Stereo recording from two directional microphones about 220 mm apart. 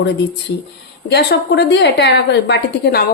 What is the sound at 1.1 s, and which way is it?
A woman's voice, 50° left (ahead or behind).